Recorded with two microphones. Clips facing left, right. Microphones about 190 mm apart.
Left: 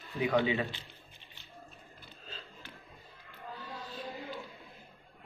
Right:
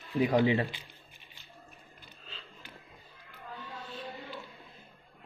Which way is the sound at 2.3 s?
40° left (ahead or behind).